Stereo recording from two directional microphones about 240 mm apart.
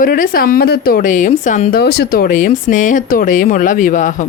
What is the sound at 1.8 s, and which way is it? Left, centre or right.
A woman's voice, left.